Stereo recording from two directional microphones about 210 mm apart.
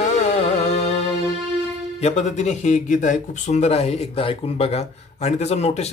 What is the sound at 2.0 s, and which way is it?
Speech, 35° left (ahead or behind).